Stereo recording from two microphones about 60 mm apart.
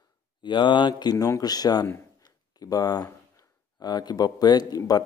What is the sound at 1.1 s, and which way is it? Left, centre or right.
Speech, left.